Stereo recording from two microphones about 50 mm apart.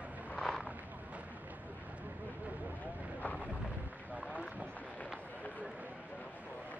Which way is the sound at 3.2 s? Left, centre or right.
Left.